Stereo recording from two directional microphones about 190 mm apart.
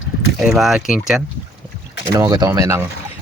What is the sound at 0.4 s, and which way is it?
Speech, centre (ahead or behind).